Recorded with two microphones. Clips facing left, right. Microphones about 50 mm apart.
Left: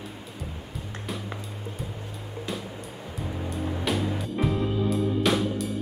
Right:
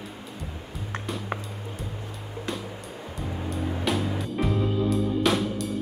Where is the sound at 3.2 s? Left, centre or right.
Centre.